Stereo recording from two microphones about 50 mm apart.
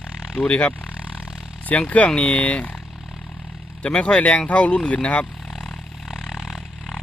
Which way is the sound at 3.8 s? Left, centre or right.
Left.